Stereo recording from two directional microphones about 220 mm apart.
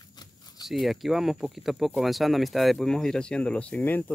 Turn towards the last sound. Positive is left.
turn(degrees=10)  # may be behind; listen again after turning